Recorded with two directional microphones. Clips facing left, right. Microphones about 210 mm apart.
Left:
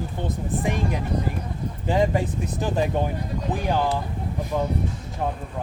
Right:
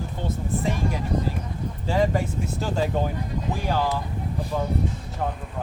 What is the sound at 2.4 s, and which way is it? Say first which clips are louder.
Speech: left 2 dB; 15° left (ahead or behind).